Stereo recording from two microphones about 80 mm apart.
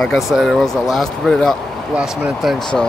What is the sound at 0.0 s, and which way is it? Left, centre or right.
Speech, centre.